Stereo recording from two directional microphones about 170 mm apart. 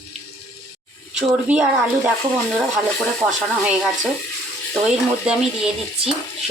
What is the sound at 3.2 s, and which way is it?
Speech, centre (ahead or behind).